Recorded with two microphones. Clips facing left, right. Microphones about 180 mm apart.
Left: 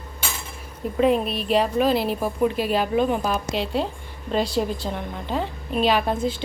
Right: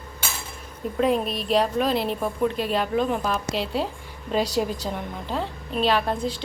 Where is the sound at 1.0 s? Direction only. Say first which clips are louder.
Left 3 dB; centre (ahead or behind).